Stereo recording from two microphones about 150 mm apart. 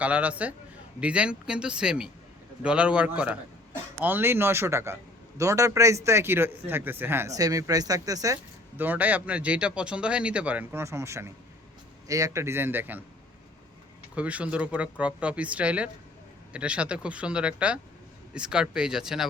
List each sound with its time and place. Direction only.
0.0 s a man's voice: 10° right (ahead or behind)
8.7 s a man's voice: 10° right (ahead or behind)
14.2 s a man's voice: 10° right (ahead or behind)